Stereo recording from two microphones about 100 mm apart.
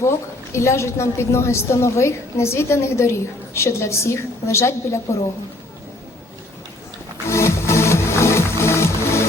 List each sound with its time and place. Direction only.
0.5 s a woman's voice: 30° left (ahead or behind)
7.3 s music: 30° left (ahead or behind)